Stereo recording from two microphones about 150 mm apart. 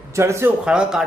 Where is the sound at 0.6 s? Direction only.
5° right (ahead or behind).